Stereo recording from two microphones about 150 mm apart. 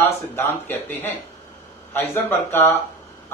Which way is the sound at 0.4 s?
15° left (ahead or behind).